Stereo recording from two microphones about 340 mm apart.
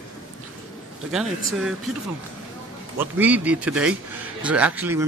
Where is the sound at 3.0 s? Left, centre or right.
Centre.